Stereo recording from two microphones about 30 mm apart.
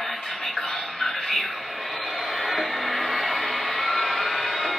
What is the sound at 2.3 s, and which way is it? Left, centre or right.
Music, centre.